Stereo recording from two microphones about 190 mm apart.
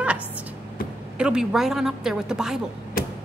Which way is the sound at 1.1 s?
5° right (ahead or behind).